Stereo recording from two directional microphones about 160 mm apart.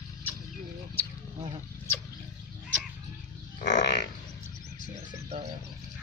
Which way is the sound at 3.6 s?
90° left.